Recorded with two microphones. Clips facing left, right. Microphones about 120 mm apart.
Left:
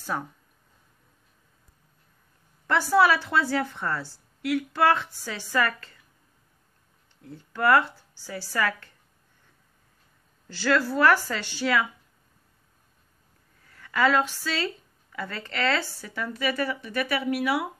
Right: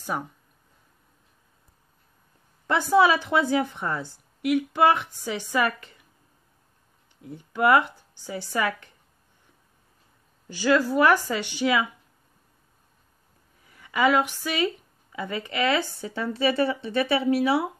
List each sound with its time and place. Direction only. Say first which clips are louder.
0.1 s a woman's voice: even; 10° right (ahead or behind)
2.6 s a woman's voice: right 1 dB; 20° right (ahead or behind)
7.2 s a woman's voice: right 4 dB; 15° right (ahead or behind)
10.5 s a woman's voice: right 3 dB; 15° right (ahead or behind)
13.7 s a woman's voice: right 1 dB; 15° right (ahead or behind)